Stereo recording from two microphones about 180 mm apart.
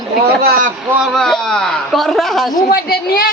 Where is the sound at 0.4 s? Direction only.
50° right (ahead or behind).